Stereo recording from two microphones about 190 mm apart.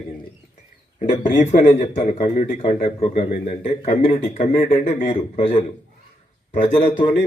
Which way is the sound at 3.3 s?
40° left (ahead or behind).